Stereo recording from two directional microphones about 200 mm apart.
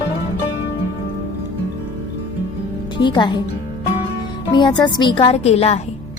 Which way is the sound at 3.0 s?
20° left (ahead or behind).